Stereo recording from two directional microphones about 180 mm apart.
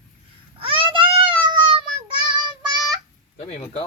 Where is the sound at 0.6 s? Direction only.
30° right (ahead or behind).